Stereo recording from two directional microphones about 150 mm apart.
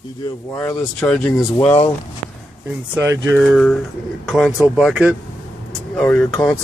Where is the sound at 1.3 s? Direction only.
20° left (ahead or behind).